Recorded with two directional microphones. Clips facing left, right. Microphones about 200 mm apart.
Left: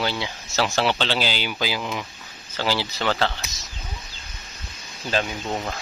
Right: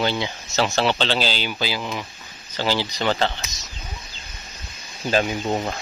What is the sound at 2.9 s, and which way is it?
Speech, 15° right (ahead or behind).